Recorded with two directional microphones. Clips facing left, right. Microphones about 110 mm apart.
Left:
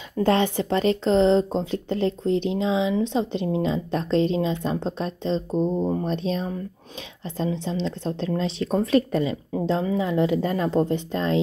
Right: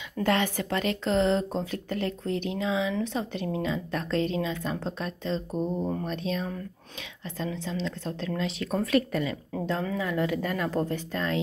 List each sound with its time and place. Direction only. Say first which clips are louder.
0.2 s speech: left 5 dB; 30° left (ahead or behind)